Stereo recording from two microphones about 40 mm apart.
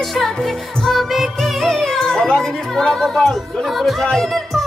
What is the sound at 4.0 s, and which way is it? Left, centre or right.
Music, centre.